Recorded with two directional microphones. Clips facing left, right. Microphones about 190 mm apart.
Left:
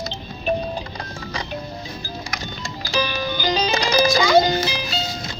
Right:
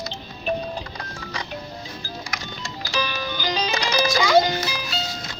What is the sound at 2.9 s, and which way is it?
Music, 30° left (ahead or behind).